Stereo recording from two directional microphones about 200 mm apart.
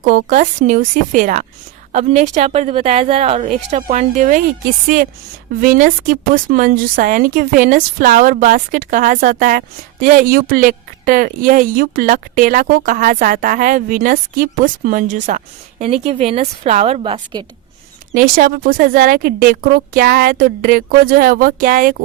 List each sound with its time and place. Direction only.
0.0 s a woman's voice: 40° right (ahead or behind)
18.1 s a woman's voice: 45° right (ahead or behind)